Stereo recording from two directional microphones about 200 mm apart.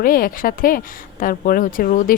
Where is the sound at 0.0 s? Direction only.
45° left (ahead or behind).